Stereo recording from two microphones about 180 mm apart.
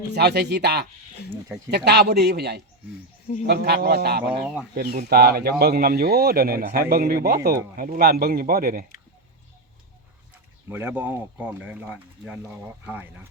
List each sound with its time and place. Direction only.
0.1 s speech: 65° right (ahead or behind)
10.7 s speech: 10° right (ahead or behind)